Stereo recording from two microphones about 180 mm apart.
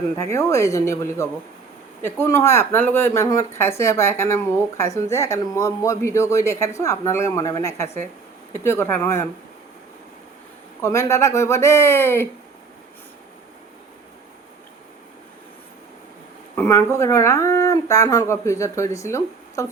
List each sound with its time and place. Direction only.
0.2 s speech: 15° left (ahead or behind)
10.8 s speech: 15° left (ahead or behind)
16.6 s speech: 15° left (ahead or behind)